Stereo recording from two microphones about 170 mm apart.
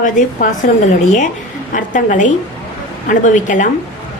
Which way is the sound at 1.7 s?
50° left (ahead or behind).